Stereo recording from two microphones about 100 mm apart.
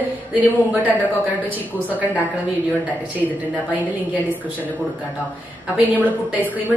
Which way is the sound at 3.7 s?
15° right (ahead or behind).